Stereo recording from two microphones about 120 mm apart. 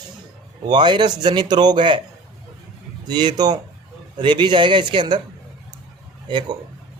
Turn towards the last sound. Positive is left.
turn(degrees=-40)  # may be behind; listen again after turning